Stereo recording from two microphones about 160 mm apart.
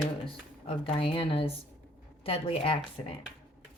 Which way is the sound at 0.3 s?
35° left (ahead or behind).